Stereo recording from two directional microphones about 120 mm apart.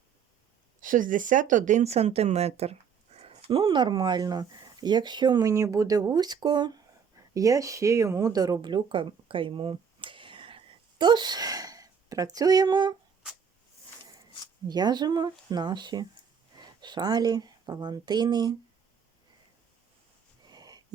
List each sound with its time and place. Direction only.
0.8 s speech: 90° right; by 13.0 s 35° right (ahead or behind)
14.7 s a woman's voice: 35° right (ahead or behind)
20.4 s wheeze: 35° right (ahead or behind)